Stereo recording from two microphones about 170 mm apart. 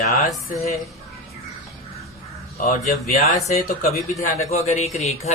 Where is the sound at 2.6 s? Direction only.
55° left (ahead or behind).